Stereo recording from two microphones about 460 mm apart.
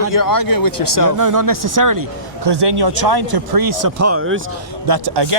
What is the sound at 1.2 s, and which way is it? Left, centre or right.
A man's voice, right.